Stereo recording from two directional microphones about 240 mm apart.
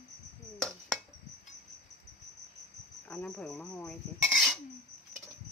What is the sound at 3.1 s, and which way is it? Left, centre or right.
Speech, centre.